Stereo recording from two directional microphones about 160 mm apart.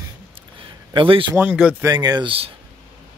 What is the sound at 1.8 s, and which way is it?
Speech, 25° right (ahead or behind).